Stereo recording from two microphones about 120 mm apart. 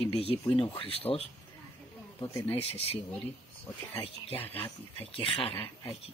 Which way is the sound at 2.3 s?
25° left (ahead or behind).